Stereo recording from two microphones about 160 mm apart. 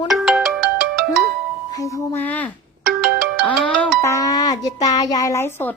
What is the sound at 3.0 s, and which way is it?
Ringtone, 75° right (ahead or behind).